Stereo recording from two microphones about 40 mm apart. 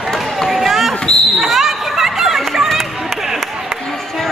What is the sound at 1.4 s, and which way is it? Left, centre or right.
Basketball bounce, centre.